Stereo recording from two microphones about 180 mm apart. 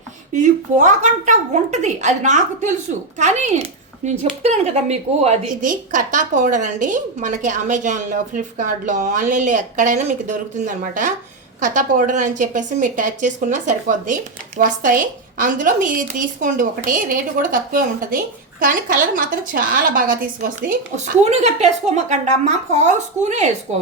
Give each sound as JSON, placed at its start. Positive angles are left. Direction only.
{"t": 0.3, "sound": "a woman's voice", "side_deg": -45}